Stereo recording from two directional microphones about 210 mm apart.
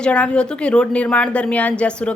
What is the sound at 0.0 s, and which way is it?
A woman's voice, 5° left (ahead or behind).